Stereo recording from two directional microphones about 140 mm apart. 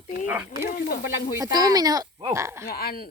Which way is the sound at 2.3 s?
20° right (ahead or behind).